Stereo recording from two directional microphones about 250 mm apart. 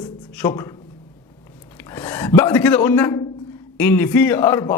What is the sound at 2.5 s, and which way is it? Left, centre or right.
A man's voice, centre.